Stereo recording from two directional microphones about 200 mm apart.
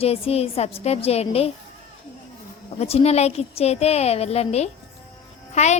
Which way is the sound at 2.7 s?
30° left (ahead or behind).